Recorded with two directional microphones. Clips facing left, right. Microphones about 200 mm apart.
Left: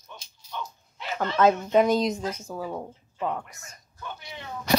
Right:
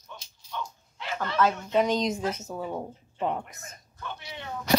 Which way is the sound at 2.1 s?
10° right (ahead or behind).